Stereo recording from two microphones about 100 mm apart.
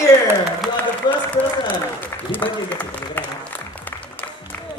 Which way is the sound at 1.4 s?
90° left.